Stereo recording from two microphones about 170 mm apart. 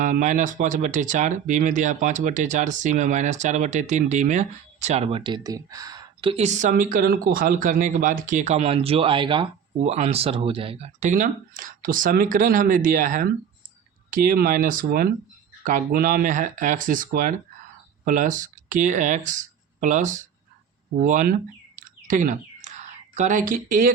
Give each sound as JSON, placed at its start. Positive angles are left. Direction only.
{"t": 0.0, "sound": "speech", "side_deg": -50}
{"t": 6.3, "sound": "speech", "side_deg": -45}
{"t": 21.8, "sound": "a sound", "side_deg": -50}